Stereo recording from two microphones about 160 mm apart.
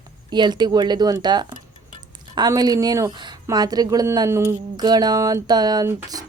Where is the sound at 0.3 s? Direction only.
25° right (ahead or behind).